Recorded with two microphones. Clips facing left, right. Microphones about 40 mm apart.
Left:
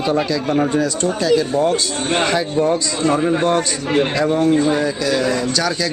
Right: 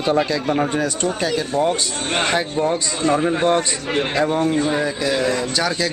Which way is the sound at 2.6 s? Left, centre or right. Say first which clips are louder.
Left 3 dB; centre.